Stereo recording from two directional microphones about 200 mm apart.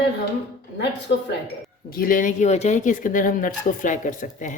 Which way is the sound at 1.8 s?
45° left (ahead or behind).